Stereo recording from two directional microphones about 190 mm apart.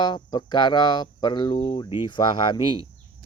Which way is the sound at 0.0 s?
20° left (ahead or behind).